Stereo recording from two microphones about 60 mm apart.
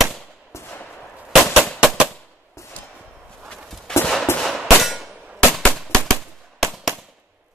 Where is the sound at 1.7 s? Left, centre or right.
Centre.